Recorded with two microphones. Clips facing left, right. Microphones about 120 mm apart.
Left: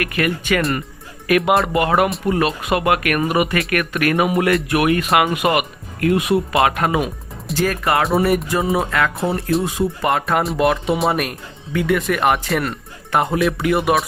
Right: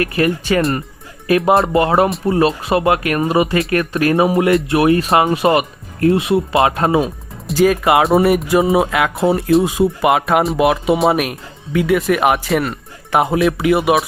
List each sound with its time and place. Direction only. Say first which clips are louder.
0.0 s speech: right 4 dB; 30° right (ahead or behind)
7.5 s speech: right 6 dB; 15° right (ahead or behind)